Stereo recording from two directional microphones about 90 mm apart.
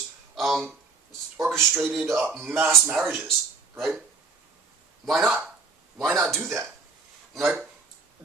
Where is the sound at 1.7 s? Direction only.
20° right (ahead or behind).